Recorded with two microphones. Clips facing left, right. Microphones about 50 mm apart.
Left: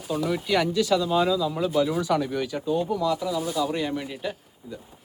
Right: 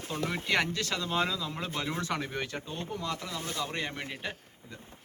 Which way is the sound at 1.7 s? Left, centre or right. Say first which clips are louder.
Left 10 dB; right.